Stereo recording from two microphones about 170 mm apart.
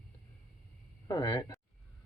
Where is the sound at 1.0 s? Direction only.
20° left (ahead or behind).